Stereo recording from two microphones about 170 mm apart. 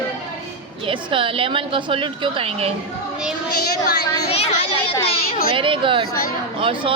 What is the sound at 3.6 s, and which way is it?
Speech, 65° left (ahead or behind).